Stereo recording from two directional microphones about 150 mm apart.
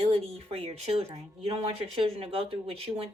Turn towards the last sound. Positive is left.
turn(degrees=-40)  # may be behind; listen again after turning